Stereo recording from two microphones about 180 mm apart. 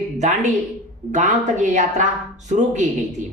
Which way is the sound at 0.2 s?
40° right (ahead or behind).